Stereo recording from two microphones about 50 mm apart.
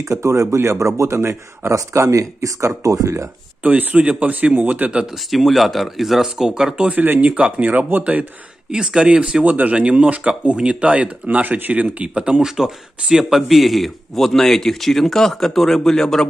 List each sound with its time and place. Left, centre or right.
0.0 s speech: right
0.6 s speech: right
3.6 s speech: right
5.0 s speech: centre
7.2 s speech: right
8.7 s speech: centre